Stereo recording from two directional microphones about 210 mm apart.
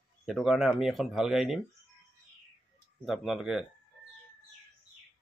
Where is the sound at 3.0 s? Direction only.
Centre (ahead or behind).